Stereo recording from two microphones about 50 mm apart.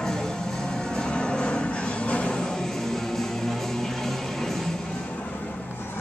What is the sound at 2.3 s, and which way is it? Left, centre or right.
Music, centre.